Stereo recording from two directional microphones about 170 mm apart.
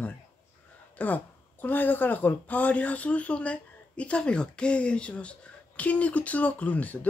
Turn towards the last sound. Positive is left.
turn(degrees=10)  # may be behind; listen again after turning